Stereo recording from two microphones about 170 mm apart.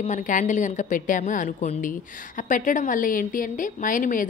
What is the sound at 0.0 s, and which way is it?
A woman's voice, 45° left (ahead or behind).